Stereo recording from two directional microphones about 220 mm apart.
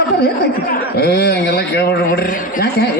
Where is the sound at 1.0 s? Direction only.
45° left (ahead or behind).